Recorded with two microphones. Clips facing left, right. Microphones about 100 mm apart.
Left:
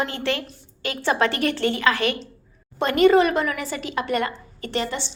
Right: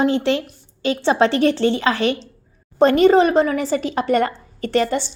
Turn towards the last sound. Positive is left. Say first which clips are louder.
# right 8 dB
turn(degrees=-45)  # may be behind; listen again after turning